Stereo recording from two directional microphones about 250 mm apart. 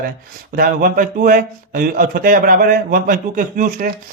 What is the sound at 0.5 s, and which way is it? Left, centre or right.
A man's voice, right.